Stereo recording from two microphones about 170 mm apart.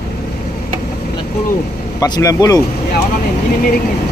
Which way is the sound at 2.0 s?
20° left (ahead or behind).